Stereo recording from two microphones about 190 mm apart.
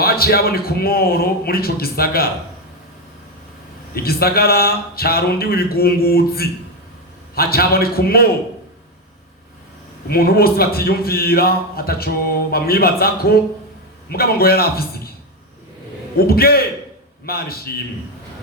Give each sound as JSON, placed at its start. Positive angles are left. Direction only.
{"t": 0.0, "sound": "a man's voice", "side_deg": 55}
{"t": 3.9, "sound": "a man's voice", "side_deg": 55}
{"t": 10.1, "sound": "a man's voice", "side_deg": 55}
{"t": 16.1, "sound": "a man's voice", "side_deg": 55}